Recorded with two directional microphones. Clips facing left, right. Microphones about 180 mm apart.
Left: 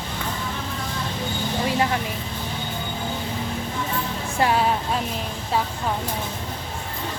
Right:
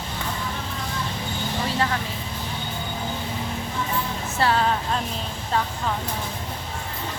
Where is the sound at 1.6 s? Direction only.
15° left (ahead or behind).